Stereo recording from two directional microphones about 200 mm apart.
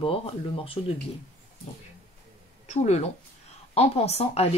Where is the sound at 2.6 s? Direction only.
35° left (ahead or behind).